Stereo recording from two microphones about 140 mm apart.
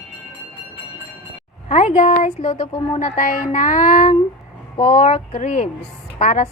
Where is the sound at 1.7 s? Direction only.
65° left (ahead or behind).